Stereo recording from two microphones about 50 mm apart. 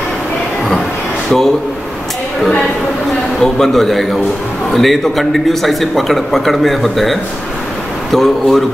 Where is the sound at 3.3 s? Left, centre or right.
Centre.